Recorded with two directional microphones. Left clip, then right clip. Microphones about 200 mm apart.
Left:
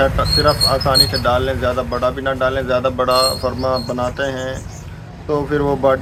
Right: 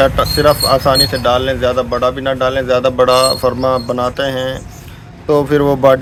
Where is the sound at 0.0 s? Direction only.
60° right (ahead or behind).